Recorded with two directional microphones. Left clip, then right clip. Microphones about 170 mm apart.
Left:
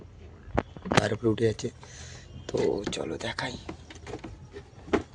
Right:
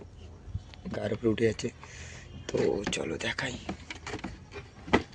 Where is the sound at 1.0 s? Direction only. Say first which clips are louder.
Left 1 dB; 5° left (ahead or behind).